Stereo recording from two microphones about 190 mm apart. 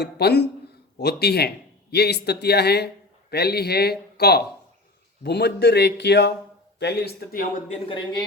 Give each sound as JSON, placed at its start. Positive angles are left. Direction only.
{"t": 0.0, "sound": "a man's voice", "side_deg": 60}
{"t": 7.7, "sound": "speech", "side_deg": 25}